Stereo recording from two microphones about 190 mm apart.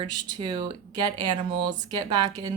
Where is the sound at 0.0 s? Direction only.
25° right (ahead or behind).